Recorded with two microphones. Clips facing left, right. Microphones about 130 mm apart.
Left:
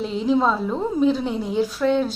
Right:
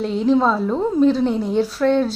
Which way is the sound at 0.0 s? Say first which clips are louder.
Right 3 dB; centre (ahead or behind).